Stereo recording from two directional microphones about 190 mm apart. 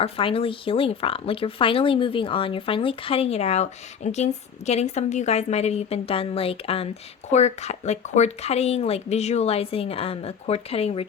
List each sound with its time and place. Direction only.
0.0 s speech: 30° left (ahead or behind)